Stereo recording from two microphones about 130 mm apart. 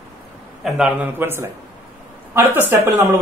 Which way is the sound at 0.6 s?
5° right (ahead or behind).